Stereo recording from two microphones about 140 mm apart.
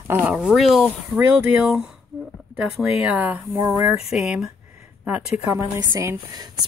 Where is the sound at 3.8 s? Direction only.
5° right (ahead or behind).